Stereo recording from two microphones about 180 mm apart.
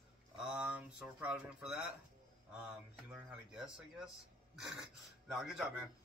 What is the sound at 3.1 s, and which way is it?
A man's voice, 5° right (ahead or behind).